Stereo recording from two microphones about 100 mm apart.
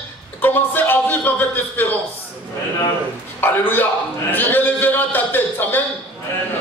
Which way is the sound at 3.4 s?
20° left (ahead or behind).